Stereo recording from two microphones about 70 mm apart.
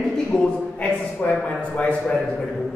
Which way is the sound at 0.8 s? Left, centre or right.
Left.